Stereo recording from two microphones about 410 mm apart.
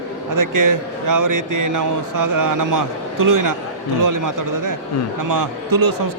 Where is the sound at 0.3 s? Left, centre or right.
Right.